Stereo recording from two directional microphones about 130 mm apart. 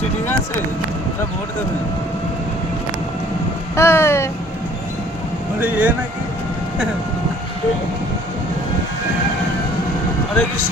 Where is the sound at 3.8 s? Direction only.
20° left (ahead or behind).